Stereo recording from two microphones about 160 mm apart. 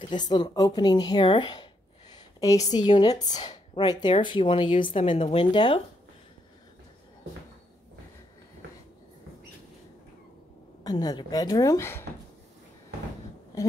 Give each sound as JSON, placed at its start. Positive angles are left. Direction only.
{"t": 0.1, "sound": "a woman's voice", "side_deg": 25}
{"t": 10.8, "sound": "a woman's voice", "side_deg": 25}
{"t": 13.5, "sound": "a woman's voice", "side_deg": 20}